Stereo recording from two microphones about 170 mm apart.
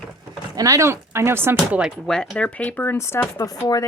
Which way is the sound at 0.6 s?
20° right (ahead or behind).